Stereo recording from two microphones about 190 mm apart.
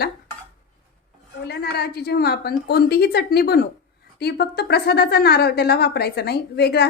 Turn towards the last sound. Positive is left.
turn(degrees=60)  # may be behind; listen again after turning